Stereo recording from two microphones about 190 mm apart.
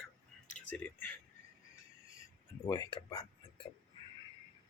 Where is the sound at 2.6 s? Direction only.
20° left (ahead or behind).